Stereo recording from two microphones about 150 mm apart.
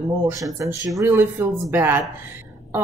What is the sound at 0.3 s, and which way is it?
Speech, 20° right (ahead or behind).